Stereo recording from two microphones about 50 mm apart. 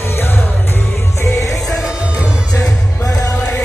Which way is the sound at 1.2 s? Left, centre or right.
Left.